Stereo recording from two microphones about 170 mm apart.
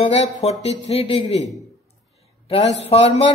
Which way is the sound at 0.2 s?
40° left (ahead or behind).